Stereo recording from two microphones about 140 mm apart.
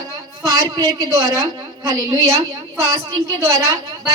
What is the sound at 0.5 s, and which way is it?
Speech, 35° right (ahead or behind).